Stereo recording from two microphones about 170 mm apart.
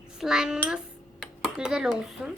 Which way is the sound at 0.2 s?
5° right (ahead or behind).